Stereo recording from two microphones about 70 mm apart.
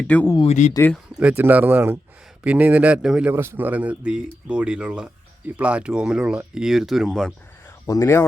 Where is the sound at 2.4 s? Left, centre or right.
Right.